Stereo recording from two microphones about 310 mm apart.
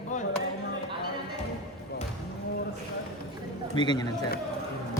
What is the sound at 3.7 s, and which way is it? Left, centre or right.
Speech, centre.